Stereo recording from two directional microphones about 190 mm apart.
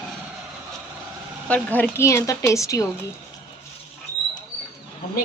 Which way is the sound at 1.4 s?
10° left (ahead or behind).